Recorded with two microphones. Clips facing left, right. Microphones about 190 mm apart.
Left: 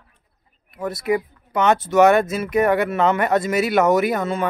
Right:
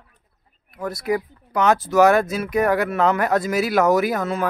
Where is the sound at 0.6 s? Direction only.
Centre (ahead or behind).